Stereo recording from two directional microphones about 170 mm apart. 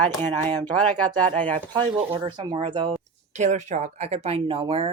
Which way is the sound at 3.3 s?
45° right (ahead or behind).